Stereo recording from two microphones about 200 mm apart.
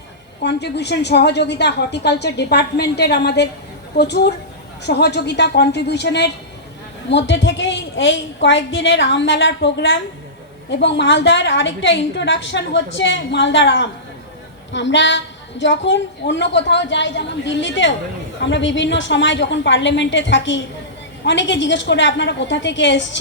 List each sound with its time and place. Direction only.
0.4 s a woman's voice: 60° left (ahead or behind)